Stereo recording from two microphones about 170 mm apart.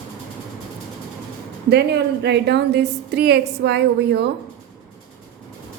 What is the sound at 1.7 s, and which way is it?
A woman's voice, 85° right.